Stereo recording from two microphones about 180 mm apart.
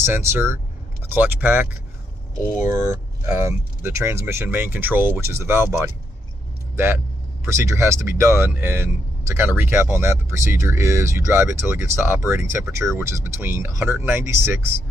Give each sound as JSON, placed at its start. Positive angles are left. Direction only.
{"t": 0.0, "sound": "speech", "side_deg": -15}
{"t": 6.7, "sound": "vehicle", "side_deg": -15}
{"t": 7.4, "sound": "speech", "side_deg": -15}